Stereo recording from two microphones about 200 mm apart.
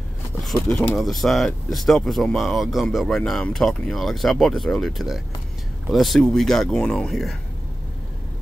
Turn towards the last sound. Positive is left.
turn(degrees=0)  # may be behind; listen again after turning